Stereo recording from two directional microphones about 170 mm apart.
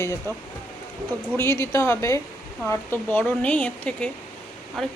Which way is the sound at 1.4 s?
15° left (ahead or behind).